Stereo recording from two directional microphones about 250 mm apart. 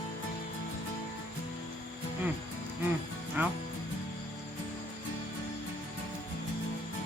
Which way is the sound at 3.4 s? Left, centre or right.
Centre.